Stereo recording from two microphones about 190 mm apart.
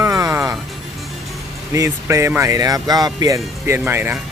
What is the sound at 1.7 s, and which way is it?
Speech, 15° right (ahead or behind).